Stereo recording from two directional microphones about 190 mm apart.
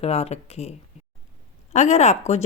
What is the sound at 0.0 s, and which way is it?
Speech, 35° left (ahead or behind).